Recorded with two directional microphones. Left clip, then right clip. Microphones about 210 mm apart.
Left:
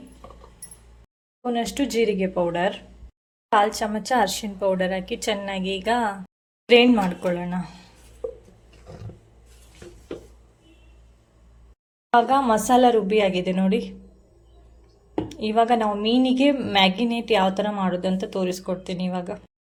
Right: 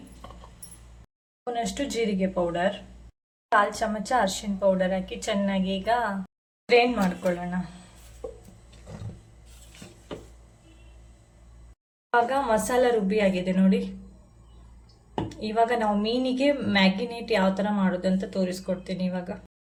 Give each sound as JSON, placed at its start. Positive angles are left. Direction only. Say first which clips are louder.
{"t": 1.5, "sound": "a woman's voice", "louder": "left 5 dB", "side_deg": 40}
{"t": 8.2, "sound": "a sound", "louder": "left 6 dB", "side_deg": 0}
{"t": 12.1, "sound": "a woman's voice", "louder": "left 4 dB", "side_deg": 30}
{"t": 15.3, "sound": "a woman's voice", "louder": "left 4 dB", "side_deg": 30}